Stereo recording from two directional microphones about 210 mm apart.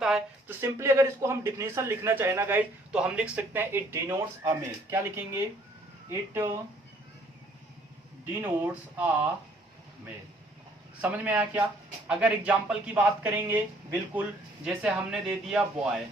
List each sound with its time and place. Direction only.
0.0 s speech: 5° right (ahead or behind)
8.2 s speech: 10° right (ahead or behind)
11.0 s speech: 5° right (ahead or behind)